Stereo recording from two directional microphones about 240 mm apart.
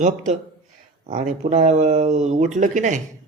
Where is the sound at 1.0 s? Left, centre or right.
Right.